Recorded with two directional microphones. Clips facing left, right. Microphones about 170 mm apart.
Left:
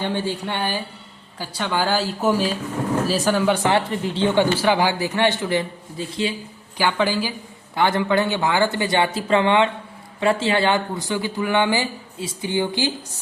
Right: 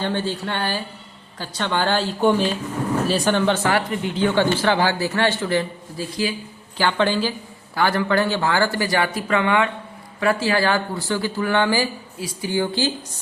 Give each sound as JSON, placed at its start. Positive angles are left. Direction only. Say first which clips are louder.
{"t": 0.0, "sound": "a man's voice", "louder": "even", "side_deg": 15}
{"t": 3.9, "sound": "a woman's voice", "louder": "even", "side_deg": 30}
{"t": 4.3, "sound": "a man's voice", "louder": "left 1 dB", "side_deg": 15}
{"t": 6.7, "sound": "a man's voice", "louder": "right 1 dB", "side_deg": 10}
{"t": 7.8, "sound": "speech", "louder": "even", "side_deg": 20}